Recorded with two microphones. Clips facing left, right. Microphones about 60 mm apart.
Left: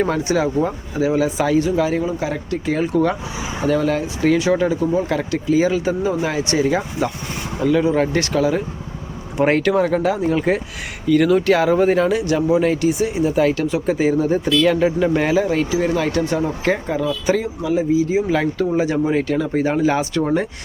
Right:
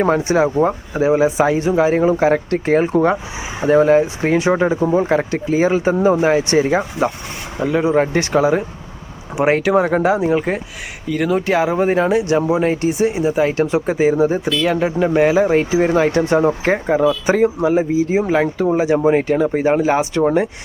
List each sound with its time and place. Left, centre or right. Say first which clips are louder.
0.0 s speech: right 4 dB; right
9.3 s speech: right 2 dB; centre
15.4 s speech: right 4 dB; right